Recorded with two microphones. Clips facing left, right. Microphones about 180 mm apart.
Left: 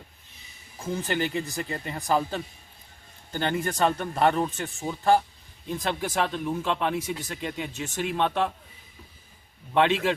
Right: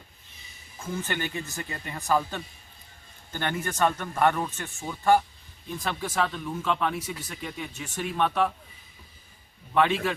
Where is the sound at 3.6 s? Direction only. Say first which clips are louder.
Right 1 dB; 35° left (ahead or behind).